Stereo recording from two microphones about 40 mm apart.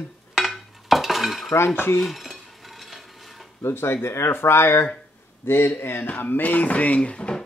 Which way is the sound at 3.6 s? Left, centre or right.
Left.